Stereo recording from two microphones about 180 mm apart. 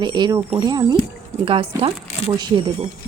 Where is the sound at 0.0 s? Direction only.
25° right (ahead or behind).